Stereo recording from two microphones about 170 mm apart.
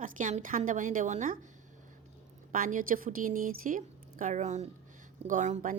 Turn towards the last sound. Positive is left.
turn(degrees=-45)  # may be behind; listen again after turning